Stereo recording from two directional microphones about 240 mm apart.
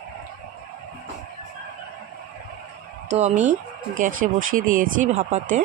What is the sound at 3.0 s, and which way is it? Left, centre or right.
Speech, right.